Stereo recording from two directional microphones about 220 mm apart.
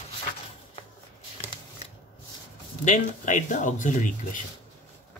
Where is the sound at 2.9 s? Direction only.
35° left (ahead or behind).